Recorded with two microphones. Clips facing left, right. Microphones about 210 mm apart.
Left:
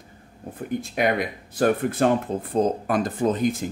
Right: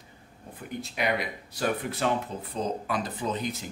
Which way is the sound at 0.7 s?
50° left (ahead or behind).